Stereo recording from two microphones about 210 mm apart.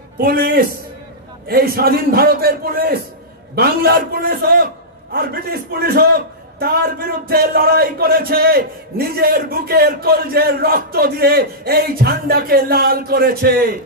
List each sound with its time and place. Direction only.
0.2 s a man's voice: 45° right (ahead or behind)